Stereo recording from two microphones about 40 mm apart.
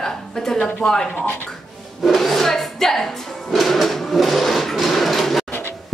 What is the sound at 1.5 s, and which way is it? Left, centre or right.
Speech, centre.